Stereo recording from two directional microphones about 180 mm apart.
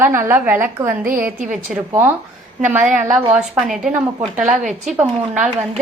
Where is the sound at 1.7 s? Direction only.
10° right (ahead or behind).